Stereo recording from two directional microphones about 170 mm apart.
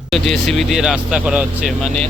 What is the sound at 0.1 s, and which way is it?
Speech, centre (ahead or behind).